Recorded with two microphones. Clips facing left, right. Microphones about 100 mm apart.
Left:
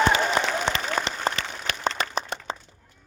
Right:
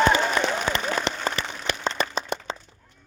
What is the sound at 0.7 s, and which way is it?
Applause, 25° left (ahead or behind).